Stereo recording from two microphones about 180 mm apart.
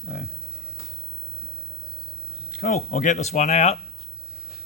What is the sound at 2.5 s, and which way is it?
Speech, 45° left (ahead or behind).